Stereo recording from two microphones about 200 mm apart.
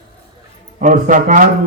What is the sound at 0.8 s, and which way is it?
Speech, 40° right (ahead or behind).